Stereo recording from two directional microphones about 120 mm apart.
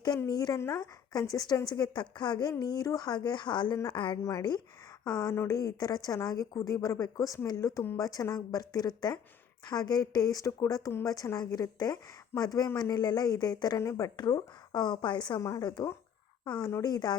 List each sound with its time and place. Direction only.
0.3 s a woman's voice: 35° left (ahead or behind)
4.2 s speech: 25° left (ahead or behind); by 15.4 s 40° left (ahead or behind)
15.4 s speech: 30° left (ahead or behind)